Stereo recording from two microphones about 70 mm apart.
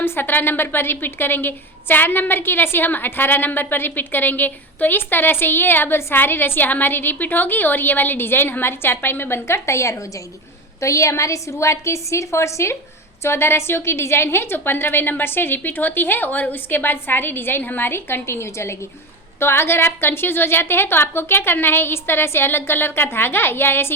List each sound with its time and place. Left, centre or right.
0.0 s a woman's voice: left